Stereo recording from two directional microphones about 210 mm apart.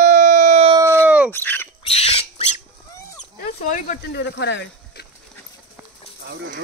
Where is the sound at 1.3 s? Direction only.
10° left (ahead or behind).